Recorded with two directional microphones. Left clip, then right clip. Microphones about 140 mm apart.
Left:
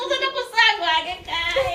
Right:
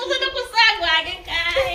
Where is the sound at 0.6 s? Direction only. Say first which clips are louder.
Right 1 dB; 25° right (ahead or behind).